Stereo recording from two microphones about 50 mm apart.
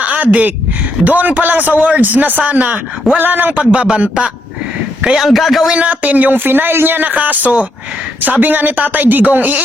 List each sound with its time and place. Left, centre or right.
0.0 s a sound: right
1.0 s a man's voice: right
3.2 s speech: right
3.6 s a man's voice: right
5.1 s a man's voice: centre
5.6 s speech: right